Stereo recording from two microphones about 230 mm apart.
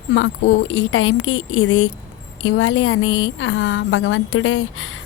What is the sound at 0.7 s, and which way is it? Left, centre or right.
Speech, left.